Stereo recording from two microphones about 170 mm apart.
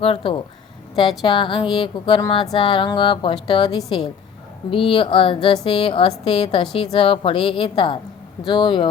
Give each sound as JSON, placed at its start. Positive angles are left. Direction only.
{"t": 0.0, "sound": "a woman's voice", "side_deg": 30}